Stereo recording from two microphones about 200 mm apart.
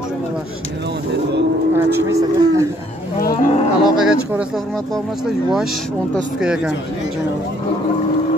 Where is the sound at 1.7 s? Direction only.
15° right (ahead or behind).